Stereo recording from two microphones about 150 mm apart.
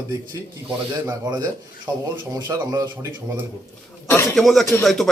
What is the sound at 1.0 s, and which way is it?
A man's voice, 25° right (ahead or behind).